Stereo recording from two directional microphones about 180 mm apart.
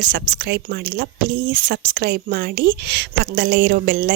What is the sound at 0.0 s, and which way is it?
A woman's voice, 55° right (ahead or behind).